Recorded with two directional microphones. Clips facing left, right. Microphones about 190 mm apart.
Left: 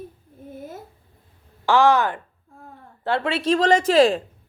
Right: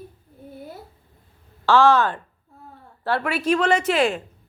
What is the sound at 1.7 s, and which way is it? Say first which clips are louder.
A woman's voice: right 1 dB; 15° left (ahead or behind).